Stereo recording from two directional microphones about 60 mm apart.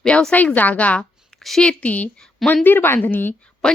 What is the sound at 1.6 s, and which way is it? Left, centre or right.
Speech, left.